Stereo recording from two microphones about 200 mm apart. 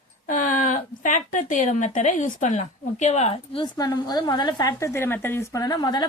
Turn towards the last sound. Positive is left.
turn(degrees=20)  # may be behind; listen again after turning